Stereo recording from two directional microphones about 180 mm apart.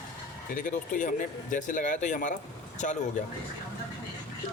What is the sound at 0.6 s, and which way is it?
Speech, 50° left (ahead or behind).